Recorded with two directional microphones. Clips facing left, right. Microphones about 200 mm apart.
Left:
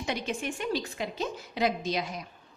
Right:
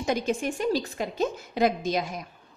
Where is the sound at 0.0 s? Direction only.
45° right (ahead or behind).